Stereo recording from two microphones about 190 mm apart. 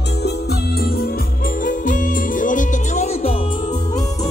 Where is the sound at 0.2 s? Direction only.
55° left (ahead or behind); by 3.4 s 35° left (ahead or behind).